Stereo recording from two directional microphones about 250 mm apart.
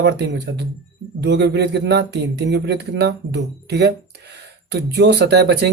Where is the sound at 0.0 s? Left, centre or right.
Right.